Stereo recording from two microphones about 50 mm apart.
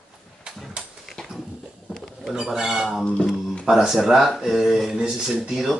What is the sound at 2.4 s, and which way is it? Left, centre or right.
Speech, centre.